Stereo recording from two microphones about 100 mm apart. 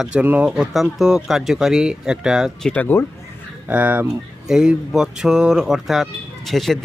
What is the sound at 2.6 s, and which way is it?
Speech, 15° left (ahead or behind).